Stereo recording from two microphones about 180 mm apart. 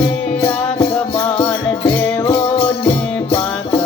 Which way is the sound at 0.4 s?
15° left (ahead or behind).